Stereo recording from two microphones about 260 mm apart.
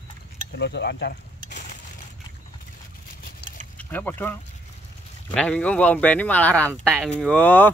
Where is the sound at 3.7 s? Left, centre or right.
Centre.